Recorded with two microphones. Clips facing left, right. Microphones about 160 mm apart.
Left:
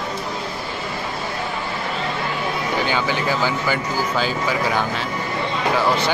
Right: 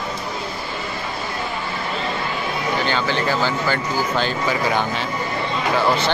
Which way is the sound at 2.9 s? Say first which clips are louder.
Even; 10° left (ahead or behind).